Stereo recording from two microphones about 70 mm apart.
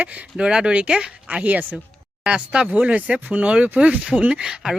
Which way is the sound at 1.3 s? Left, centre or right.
Right.